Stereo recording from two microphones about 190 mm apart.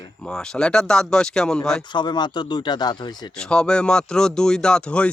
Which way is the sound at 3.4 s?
5° left (ahead or behind).